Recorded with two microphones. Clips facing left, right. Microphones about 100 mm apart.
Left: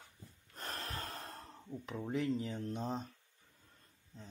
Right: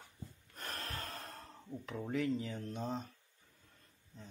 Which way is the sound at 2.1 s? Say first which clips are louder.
Even; 25° left (ahead or behind).